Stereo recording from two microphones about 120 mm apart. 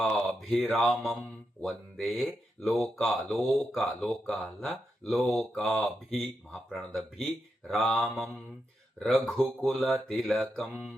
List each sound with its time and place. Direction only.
0.0 s speech: centre (ahead or behind)